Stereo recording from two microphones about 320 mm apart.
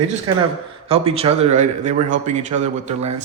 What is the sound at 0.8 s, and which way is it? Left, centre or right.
A man's voice, centre.